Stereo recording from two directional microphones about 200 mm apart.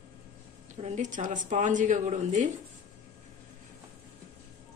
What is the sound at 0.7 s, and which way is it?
A woman's voice, 35° right (ahead or behind).